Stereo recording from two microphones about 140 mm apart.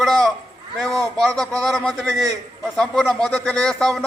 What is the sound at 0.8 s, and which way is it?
Speech, 25° right (ahead or behind).